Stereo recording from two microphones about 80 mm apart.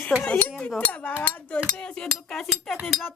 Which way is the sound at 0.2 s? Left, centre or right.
Centre.